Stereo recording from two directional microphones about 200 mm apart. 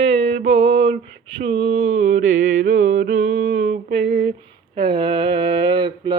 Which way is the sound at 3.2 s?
65° right (ahead or behind).